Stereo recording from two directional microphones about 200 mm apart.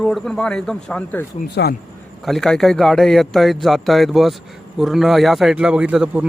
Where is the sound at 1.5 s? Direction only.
55° left (ahead or behind).